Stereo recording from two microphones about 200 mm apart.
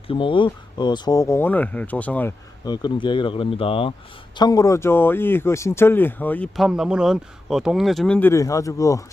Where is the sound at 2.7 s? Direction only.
20° left (ahead or behind).